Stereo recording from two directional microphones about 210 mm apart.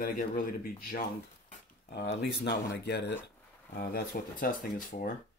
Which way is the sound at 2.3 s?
55° left (ahead or behind).